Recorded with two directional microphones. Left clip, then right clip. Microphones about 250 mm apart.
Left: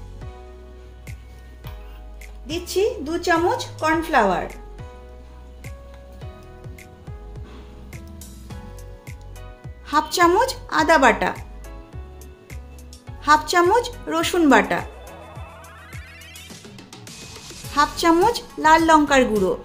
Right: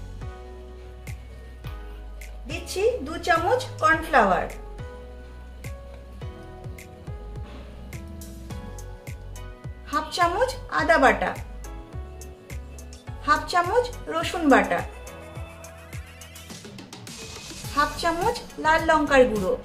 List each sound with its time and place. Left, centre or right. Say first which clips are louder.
2.5 s a woman's voice: left 2 dB; left
9.8 s a woman's voice: left 6 dB; left
13.2 s speech: left 6 dB; left
16.4 s music: even; centre
17.7 s speech: left 6 dB; left